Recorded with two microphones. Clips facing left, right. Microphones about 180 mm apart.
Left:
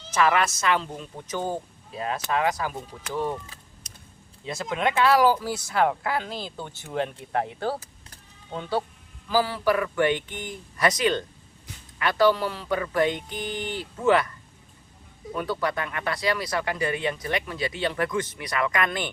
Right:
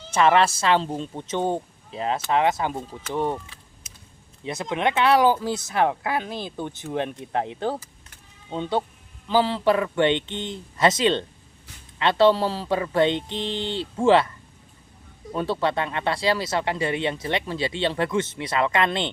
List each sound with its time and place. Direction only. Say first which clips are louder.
0.1 s speech: right 4 dB; 25° right (ahead or behind)
4.4 s speech: right 2 dB; 20° right (ahead or behind)
15.4 s speech: right 4 dB; 25° right (ahead or behind)